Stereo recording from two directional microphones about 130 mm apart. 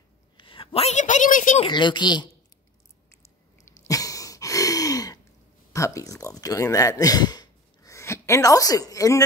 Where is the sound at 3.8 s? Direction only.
25° left (ahead or behind).